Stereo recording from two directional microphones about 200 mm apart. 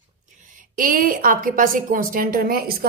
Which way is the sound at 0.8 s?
45° right (ahead or behind).